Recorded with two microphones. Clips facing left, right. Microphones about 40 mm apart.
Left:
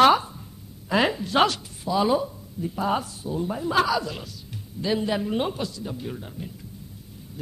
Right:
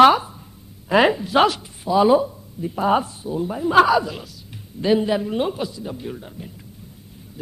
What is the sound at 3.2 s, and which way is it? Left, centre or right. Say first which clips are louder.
Speech: right 4 dB; centre.